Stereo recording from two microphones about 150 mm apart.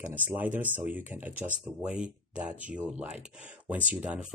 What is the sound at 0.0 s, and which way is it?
Speech, 10° right (ahead or behind).